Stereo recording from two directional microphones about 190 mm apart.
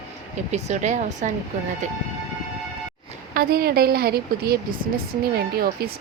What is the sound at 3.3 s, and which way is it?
A woman's voice, 55° right (ahead or behind).